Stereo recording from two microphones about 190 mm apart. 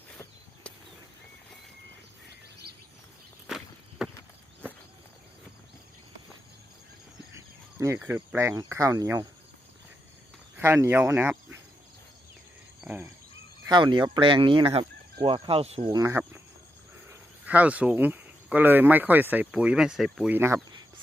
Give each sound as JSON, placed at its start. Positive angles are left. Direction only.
{"t": 0.7, "sound": "a sound", "side_deg": 5}
{"t": 3.4, "sound": "walk", "side_deg": 0}
{"t": 7.3, "sound": "speech", "side_deg": -15}
{"t": 10.6, "sound": "speech", "side_deg": -15}
{"t": 12.8, "sound": "cricket", "side_deg": -10}
{"t": 13.7, "sound": "speech", "side_deg": -25}
{"t": 15.9, "sound": "speech", "side_deg": -15}